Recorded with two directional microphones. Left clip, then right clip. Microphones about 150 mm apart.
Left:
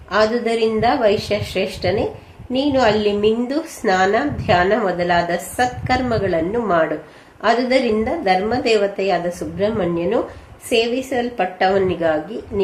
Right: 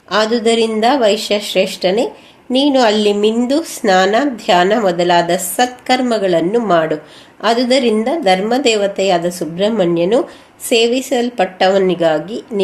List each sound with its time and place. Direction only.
0.1 s a woman's voice: 45° right (ahead or behind)